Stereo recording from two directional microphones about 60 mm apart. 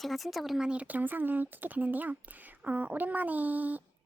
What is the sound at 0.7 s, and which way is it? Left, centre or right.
Speech, right.